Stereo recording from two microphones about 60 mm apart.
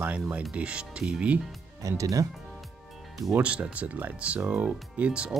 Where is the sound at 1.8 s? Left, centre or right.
Right.